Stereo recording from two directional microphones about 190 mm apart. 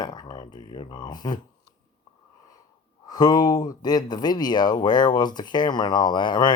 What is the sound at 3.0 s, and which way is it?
Speech, 20° left (ahead or behind).